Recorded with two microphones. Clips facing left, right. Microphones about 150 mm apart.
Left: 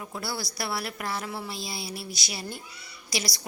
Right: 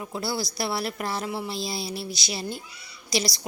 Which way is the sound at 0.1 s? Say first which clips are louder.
Right 6 dB; 25° right (ahead or behind).